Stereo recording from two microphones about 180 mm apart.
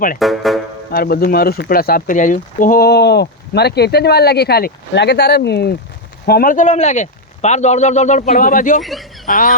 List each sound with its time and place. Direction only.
0.2 s speech: centre (ahead or behind)
0.9 s speech: 60° left (ahead or behind)
8.8 s speech: centre (ahead or behind)
9.2 s speech: 50° left (ahead or behind)